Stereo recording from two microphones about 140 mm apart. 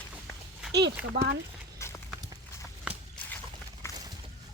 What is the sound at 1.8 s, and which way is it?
Clip-clop, 20° left (ahead or behind).